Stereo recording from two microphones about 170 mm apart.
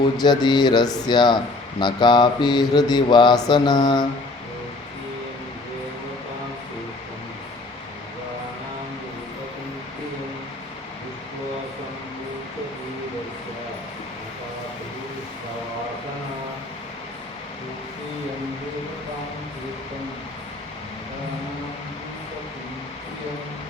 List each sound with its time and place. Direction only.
0.2 s mantra: 25° left (ahead or behind)